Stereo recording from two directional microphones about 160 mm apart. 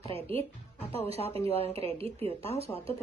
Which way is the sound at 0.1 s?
35° right (ahead or behind).